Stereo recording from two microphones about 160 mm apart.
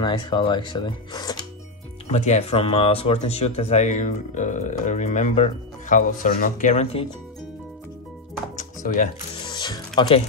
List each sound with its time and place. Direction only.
0.0 s speech: 30° left (ahead or behind)
2.0 s speech: 45° left (ahead or behind)
8.5 s music: 55° left (ahead or behind)
9.4 s music: 25° left (ahead or behind)